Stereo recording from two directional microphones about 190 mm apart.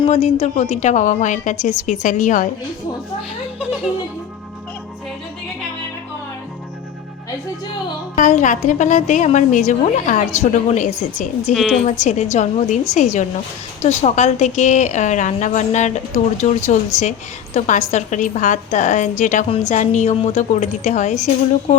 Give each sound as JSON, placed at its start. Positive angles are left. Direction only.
{"t": 0.1, "sound": "a woman's voice", "side_deg": 35}
{"t": 8.1, "sound": "a woman's voice", "side_deg": 40}
{"t": 11.5, "sound": "a woman's voice", "side_deg": 0}
{"t": 11.9, "sound": "a woman's voice", "side_deg": 40}